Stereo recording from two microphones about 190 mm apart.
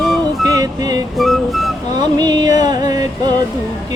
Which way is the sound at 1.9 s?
20° right (ahead or behind).